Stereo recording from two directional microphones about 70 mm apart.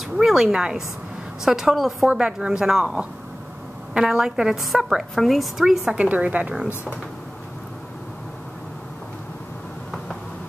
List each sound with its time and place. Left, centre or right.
0.2 s a woman's voice: centre
2.0 s a woman's voice: centre
5.9 s a woman's voice: centre